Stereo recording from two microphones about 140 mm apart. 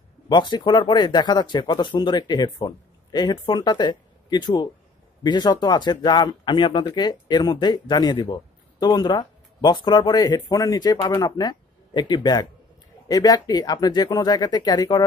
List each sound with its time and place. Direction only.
0.3 s speech: 30° left (ahead or behind)